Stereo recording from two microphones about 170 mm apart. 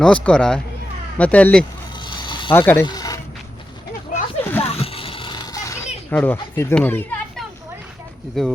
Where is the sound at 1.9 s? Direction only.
25° left (ahead or behind).